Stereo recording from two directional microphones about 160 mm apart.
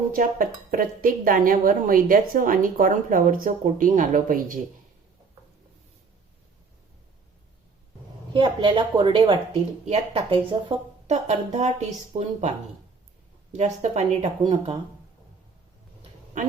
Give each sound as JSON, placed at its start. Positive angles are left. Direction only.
{"t": 0.1, "sound": "a woman's voice", "side_deg": -60}
{"t": 8.3, "sound": "speech", "side_deg": -30}
{"t": 11.0, "sound": "speech", "side_deg": -45}